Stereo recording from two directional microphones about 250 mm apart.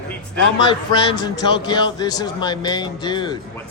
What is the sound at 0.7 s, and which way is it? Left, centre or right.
Speech, centre.